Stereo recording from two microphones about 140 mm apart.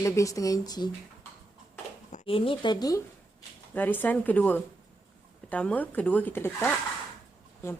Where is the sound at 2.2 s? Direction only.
40° left (ahead or behind).